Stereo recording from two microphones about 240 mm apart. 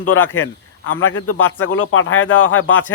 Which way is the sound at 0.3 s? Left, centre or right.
Left.